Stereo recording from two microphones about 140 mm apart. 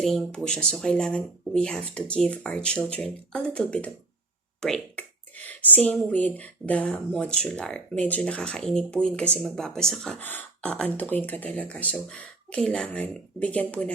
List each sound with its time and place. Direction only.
0.0 s speech: centre (ahead or behind)